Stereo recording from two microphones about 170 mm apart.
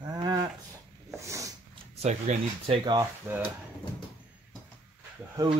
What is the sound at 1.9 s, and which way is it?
Speech, 40° right (ahead or behind).